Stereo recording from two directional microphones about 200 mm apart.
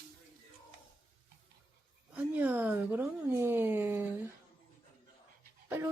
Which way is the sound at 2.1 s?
10° right (ahead or behind).